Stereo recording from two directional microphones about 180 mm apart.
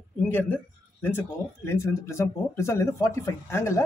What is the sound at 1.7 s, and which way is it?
Speech, 15° left (ahead or behind).